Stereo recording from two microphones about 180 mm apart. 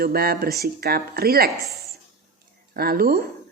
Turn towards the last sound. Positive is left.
turn(degrees=-55)  # may be behind; listen again after turning